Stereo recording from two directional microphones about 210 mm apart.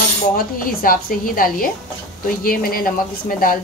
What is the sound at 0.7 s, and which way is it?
A woman's voice, 45° left (ahead or behind).